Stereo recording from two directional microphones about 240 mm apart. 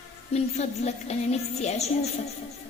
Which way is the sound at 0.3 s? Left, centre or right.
Left.